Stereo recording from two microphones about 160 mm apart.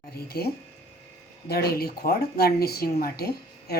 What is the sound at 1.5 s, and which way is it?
Speech, 80° left.